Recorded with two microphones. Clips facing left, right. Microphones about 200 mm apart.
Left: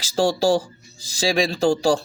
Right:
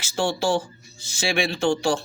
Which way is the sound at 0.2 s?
35° left (ahead or behind).